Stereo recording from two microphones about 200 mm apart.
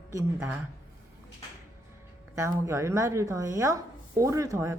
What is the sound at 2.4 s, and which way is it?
A woman's voice, 15° right (ahead or behind).